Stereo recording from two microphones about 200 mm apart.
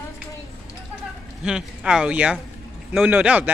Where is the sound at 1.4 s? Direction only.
5° right (ahead or behind).